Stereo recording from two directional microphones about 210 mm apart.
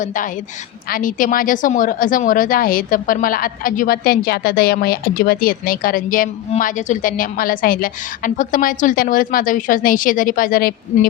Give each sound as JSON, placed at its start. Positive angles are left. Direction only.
{"t": 0.0, "sound": "a woman's voice", "side_deg": 40}